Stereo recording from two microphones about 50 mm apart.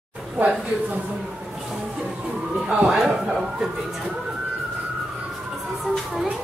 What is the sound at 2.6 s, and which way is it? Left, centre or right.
Speech, right.